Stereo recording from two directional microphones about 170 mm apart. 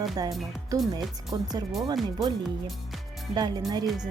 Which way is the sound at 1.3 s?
25° right (ahead or behind).